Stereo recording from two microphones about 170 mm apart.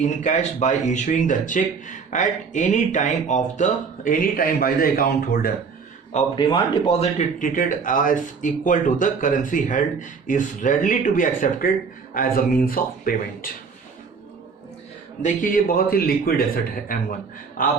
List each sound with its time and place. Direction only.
0.0 s speech: 45° left (ahead or behind); by 5.5 s 60° left (ahead or behind)
6.3 s speech: 30° left (ahead or behind); by 13.5 s 55° left (ahead or behind)
15.2 s speech: 50° left (ahead or behind)